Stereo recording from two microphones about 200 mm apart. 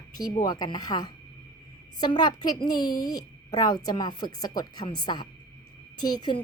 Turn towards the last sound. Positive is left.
turn(degrees=20)  # may be behind; listen again after turning